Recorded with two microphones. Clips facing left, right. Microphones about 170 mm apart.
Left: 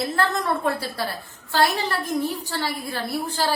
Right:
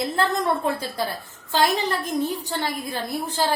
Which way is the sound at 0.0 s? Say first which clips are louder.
Right 1 dB; 20° right (ahead or behind).